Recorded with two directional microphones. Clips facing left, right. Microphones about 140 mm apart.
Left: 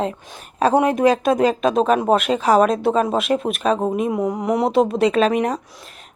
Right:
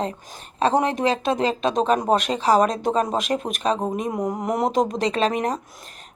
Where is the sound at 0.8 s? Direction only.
30° right (ahead or behind).